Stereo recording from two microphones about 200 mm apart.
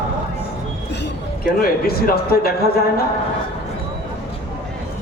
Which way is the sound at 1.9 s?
50° left (ahead or behind).